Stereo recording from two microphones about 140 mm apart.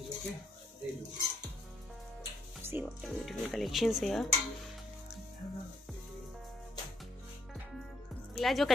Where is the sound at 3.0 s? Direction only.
Centre (ahead or behind).